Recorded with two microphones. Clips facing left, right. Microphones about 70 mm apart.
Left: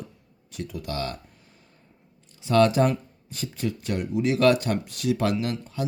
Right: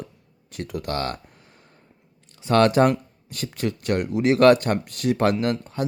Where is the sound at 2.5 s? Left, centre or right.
Right.